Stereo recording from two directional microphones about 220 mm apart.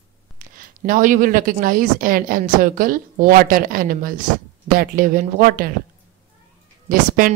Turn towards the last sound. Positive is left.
turn(degrees=-40)  # may be behind; listen again after turning